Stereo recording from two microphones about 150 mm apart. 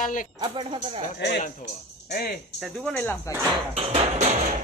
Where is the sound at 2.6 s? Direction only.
5° left (ahead or behind).